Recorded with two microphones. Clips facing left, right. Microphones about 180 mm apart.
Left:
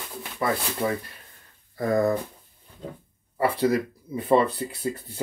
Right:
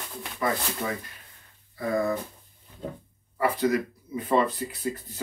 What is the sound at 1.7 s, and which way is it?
Speech, 40° left (ahead or behind).